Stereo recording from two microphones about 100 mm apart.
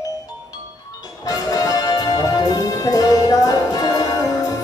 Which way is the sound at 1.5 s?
40° left (ahead or behind).